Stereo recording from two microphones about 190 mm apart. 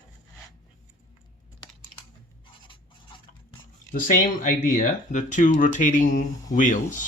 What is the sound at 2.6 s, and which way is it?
Stir, 25° left (ahead or behind).